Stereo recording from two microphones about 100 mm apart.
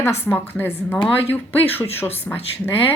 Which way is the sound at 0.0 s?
20° left (ahead or behind).